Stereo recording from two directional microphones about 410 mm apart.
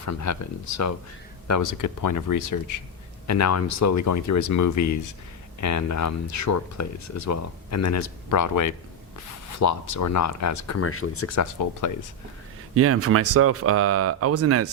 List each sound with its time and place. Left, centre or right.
0.0 s speech: left
12.7 s speech: right